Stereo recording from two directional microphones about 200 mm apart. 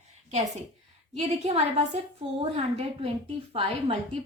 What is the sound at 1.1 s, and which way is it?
Speech, 30° right (ahead or behind).